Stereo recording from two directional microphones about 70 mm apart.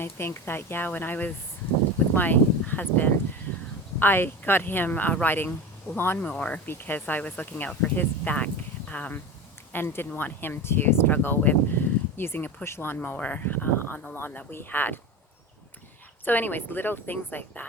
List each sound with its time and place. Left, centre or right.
0.0 s speech: left
6.3 s speech: centre
9.7 s speech: left
13.0 s speech: left
16.2 s speech: left